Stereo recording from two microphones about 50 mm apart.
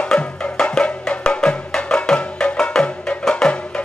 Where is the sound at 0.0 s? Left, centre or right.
Centre.